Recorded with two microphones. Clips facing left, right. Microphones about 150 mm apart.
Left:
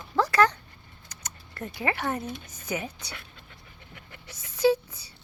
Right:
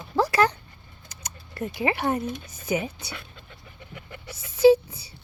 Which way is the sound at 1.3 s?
10° right (ahead or behind).